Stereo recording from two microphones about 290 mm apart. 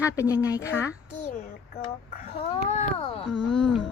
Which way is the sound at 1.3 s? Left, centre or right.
Left.